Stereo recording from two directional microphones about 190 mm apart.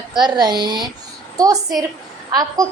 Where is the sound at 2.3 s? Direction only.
20° right (ahead or behind).